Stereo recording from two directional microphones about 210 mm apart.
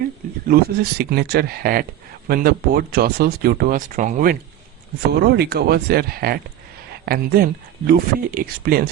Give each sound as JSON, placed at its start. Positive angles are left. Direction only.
{"t": 0.4, "sound": "speech", "side_deg": -45}